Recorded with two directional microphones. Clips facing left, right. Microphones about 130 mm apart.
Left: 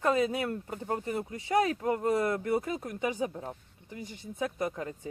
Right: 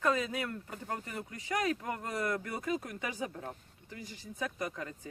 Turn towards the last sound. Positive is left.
turn(degrees=25)  # may be behind; listen again after turning